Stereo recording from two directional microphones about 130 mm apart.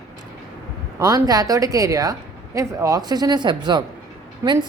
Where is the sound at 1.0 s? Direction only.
30° right (ahead or behind).